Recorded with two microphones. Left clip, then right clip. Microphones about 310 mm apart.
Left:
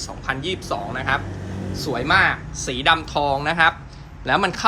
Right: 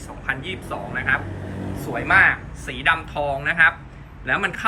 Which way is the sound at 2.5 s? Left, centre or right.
Centre.